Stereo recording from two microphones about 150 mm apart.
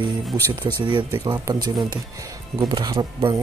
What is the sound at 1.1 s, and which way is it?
Speech, 25° right (ahead or behind).